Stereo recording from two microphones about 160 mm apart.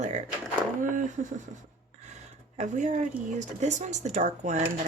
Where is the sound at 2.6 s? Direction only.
50° right (ahead or behind).